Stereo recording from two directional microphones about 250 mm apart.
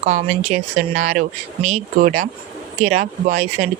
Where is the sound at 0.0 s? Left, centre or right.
Right.